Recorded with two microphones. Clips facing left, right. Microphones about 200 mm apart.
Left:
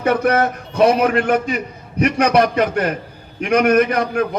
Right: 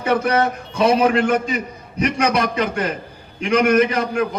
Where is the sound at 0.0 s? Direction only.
60° left (ahead or behind).